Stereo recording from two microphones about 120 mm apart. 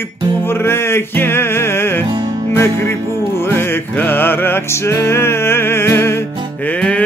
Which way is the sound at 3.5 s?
20° left (ahead or behind).